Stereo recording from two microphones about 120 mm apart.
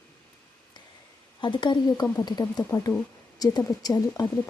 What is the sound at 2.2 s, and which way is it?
Speech, 30° left (ahead or behind).